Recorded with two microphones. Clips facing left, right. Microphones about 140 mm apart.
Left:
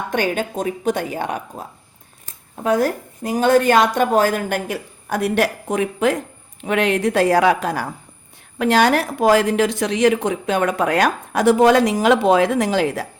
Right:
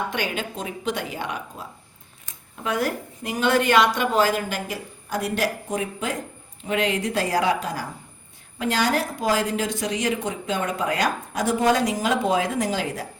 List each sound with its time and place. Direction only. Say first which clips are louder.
0.1 s a woman's voice: left 7 dB; 50° left (ahead or behind); by 13.1 s 75° left (ahead or behind)